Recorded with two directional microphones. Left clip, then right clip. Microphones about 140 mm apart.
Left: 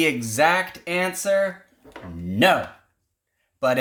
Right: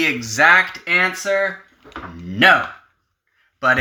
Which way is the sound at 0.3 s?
40° left (ahead or behind).